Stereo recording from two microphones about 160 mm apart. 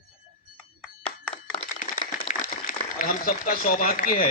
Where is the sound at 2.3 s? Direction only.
60° left (ahead or behind).